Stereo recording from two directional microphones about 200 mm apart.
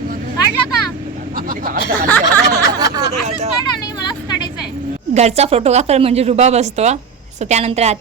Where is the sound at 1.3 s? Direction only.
45° right (ahead or behind).